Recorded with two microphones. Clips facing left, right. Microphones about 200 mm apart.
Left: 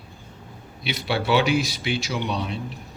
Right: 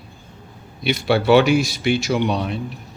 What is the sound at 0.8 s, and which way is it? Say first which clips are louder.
Speech: right 8 dB; 50° right (ahead or behind).